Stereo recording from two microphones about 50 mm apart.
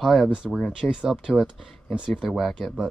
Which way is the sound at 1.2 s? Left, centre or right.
Centre.